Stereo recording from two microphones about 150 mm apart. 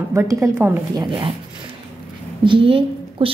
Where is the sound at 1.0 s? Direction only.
30° right (ahead or behind).